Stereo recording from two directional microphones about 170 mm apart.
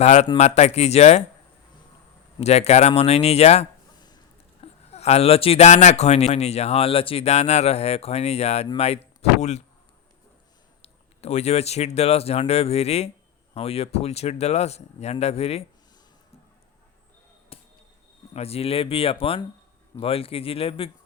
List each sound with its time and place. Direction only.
0.0 s speech: 40° left (ahead or behind)
2.4 s speech: 40° left (ahead or behind)
10.8 s speech: 40° left (ahead or behind)
18.3 s speech: 35° left (ahead or behind)